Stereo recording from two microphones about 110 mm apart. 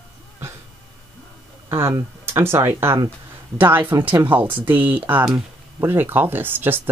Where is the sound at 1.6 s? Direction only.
25° right (ahead or behind).